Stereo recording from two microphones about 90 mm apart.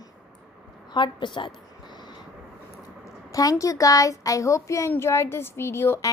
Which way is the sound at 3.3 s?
40° left (ahead or behind).